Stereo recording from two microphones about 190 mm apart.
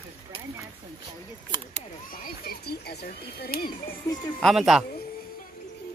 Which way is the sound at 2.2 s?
55° left (ahead or behind).